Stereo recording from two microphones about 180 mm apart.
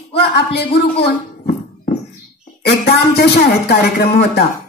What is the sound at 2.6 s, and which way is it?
Speech, 65° left (ahead or behind).